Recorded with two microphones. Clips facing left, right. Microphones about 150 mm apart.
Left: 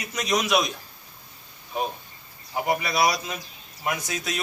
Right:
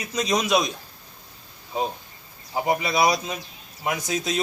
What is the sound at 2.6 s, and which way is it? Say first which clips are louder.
A man's voice: right 2 dB; 20° right (ahead or behind).